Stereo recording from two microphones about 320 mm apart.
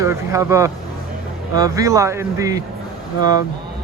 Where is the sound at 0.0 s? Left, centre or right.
Centre.